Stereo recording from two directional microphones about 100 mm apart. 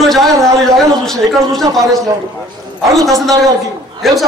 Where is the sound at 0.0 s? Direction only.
Centre (ahead or behind).